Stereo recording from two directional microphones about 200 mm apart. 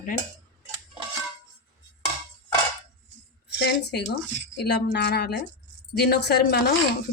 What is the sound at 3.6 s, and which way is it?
Speech, 55° left (ahead or behind).